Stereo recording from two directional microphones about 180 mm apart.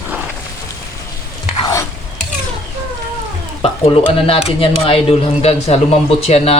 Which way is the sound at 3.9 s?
30° left (ahead or behind).